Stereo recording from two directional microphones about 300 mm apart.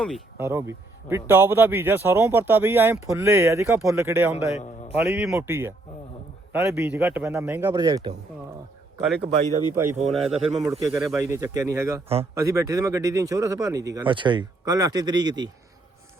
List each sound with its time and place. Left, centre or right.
0.0 s speech: centre
4.4 s a man's voice: left
4.9 s speech: centre
9.3 s speech: right
9.7 s speech: centre